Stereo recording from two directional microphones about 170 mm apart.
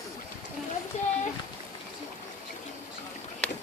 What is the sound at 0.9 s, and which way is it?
Speech, 40° left (ahead or behind).